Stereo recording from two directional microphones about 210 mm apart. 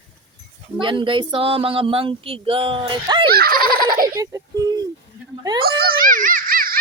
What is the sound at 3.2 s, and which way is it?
Baby laughter, 45° right (ahead or behind).